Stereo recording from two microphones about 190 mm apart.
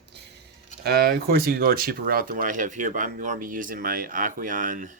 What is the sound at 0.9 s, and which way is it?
Speech, 55° right (ahead or behind).